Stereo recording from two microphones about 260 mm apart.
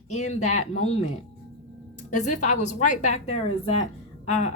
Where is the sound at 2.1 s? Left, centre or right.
Left.